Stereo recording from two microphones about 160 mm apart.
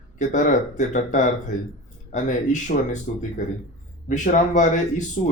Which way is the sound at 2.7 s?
50° left (ahead or behind).